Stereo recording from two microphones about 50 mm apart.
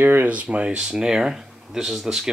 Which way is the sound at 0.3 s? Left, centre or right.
Right.